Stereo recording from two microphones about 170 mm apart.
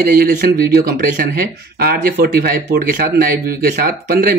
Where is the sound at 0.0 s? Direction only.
60° right (ahead or behind).